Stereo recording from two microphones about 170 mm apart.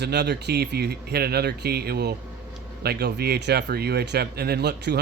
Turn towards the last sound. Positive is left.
turn(degrees=-75)  # may be behind; listen again after turning